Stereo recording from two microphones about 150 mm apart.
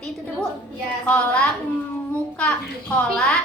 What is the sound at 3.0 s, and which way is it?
Speech, 5° left (ahead or behind).